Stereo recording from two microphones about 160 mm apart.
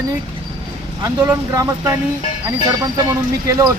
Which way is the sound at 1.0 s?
15° right (ahead or behind).